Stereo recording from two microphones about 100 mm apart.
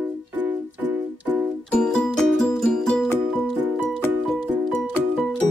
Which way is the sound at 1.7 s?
5° left (ahead or behind).